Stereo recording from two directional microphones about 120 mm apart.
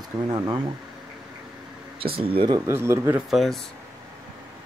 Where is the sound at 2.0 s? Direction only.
50° right (ahead or behind).